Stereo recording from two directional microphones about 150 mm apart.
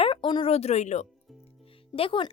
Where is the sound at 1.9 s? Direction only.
35° left (ahead or behind).